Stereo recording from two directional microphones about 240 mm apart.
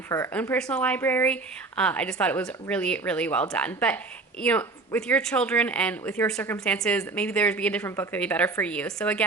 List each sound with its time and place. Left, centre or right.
0.1 s a woman's voice: centre